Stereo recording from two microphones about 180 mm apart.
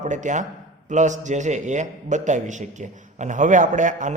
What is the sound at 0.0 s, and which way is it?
A man's voice, 45° right (ahead or behind).